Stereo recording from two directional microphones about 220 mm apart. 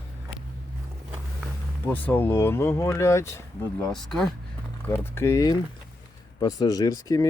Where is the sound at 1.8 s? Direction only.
10° left (ahead or behind).